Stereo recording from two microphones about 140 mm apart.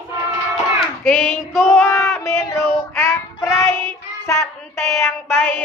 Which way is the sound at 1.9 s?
20° left (ahead or behind).